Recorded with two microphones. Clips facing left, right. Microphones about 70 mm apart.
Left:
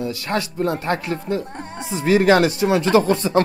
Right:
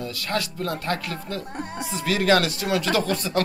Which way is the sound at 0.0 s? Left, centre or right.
Left.